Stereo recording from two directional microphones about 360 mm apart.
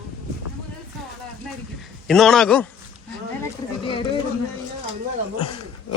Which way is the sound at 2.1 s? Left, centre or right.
Centre.